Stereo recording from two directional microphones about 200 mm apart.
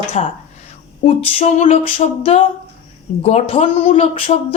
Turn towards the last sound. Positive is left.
turn(degrees=30)  # may be behind; listen again after turning